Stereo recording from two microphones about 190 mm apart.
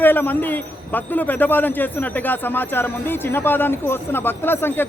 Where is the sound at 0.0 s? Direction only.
10° left (ahead or behind).